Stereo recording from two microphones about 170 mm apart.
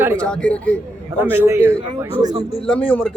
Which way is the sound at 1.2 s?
15° right (ahead or behind).